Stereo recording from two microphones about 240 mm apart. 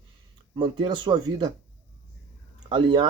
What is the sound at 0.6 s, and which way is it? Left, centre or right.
Speech, centre.